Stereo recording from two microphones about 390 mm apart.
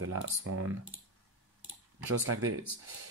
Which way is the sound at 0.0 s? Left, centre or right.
Right.